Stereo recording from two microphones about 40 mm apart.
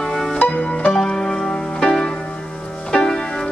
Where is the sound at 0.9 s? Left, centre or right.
Centre.